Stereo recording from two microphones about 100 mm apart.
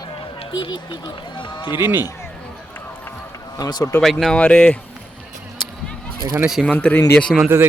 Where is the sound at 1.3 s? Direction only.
55° left (ahead or behind).